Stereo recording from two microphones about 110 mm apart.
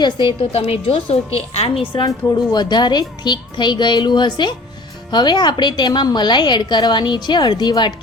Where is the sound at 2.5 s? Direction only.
40° left (ahead or behind).